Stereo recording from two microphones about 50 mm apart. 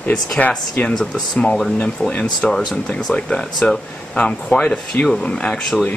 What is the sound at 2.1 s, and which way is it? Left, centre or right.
Speech, left.